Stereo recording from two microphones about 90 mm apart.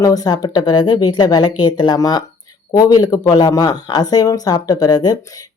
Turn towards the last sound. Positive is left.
turn(degrees=45)  # may be behind; listen again after turning